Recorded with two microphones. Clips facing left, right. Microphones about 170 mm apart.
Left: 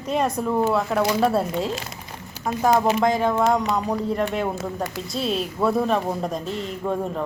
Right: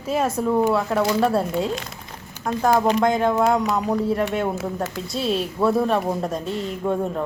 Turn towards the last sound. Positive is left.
turn(degrees=0)  # may be behind; listen again after turning